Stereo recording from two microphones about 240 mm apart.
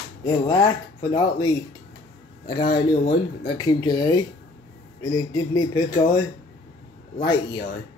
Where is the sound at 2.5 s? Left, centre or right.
Left.